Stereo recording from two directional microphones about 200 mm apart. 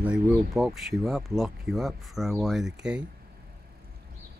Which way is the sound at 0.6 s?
Centre (ahead or behind).